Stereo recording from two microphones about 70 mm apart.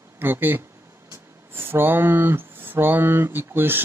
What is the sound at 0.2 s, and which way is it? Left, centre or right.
Speech, right.